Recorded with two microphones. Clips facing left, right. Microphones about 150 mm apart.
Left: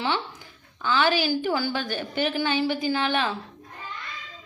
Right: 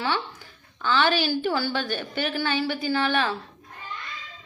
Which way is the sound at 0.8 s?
10° left (ahead or behind).